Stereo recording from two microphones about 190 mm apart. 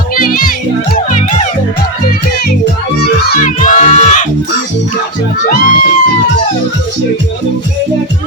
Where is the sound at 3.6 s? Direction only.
40° left (ahead or behind).